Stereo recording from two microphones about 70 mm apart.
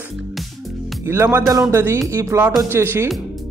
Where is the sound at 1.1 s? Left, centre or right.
Right.